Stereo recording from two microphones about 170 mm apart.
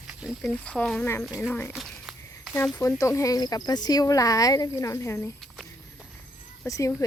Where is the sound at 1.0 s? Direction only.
15° left (ahead or behind).